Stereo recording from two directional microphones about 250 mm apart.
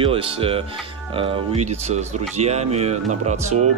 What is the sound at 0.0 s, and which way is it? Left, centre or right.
Speech, right.